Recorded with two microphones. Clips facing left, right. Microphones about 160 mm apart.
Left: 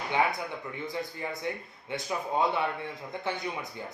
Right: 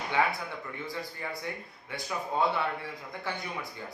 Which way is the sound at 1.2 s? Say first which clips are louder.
Left 3 dB; 20° left (ahead or behind).